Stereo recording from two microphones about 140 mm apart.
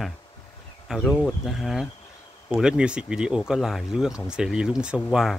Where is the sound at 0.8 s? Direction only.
Centre (ahead or behind).